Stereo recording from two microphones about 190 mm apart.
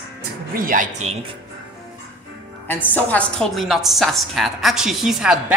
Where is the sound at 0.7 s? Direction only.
40° right (ahead or behind).